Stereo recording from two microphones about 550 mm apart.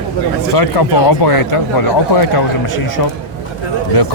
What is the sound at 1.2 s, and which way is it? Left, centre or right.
Speech, left.